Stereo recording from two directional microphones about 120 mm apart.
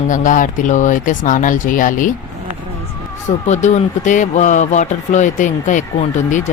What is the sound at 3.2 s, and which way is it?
Speech, 75° left (ahead or behind).